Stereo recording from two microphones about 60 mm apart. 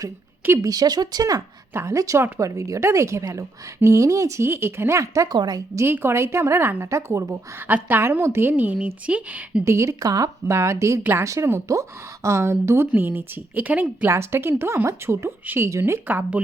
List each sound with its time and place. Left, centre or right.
0.6 s speech: right
1.7 s speech: right
2.4 s speech: right
5.8 s speech: right
6.9 s speech: right
7.7 s a woman's voice: right
8.5 s speech: right
9.6 s speech: right
10.4 s speech: right
13.6 s speech: right
14.1 s a woman's voice: right
16.0 s speech: right